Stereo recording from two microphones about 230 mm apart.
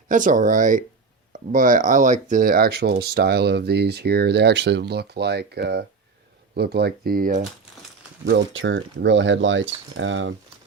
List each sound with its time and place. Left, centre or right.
0.1 s speech: right
8.2 s speech: right